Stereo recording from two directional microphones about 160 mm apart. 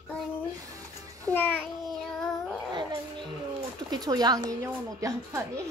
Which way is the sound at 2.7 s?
30° right (ahead or behind).